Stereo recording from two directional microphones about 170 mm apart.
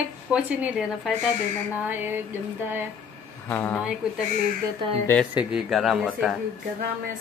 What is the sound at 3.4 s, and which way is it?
Speech, 10° left (ahead or behind).